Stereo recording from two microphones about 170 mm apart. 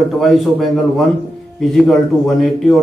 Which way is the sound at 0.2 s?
Centre (ahead or behind).